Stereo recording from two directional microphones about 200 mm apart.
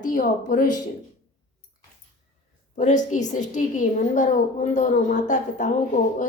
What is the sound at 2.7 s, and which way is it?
A woman's voice, 40° left (ahead or behind).